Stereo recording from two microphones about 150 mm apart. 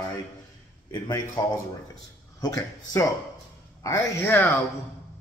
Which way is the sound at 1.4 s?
25° left (ahead or behind).